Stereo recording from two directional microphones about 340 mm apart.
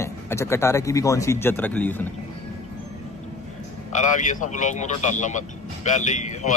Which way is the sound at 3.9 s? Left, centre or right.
Left.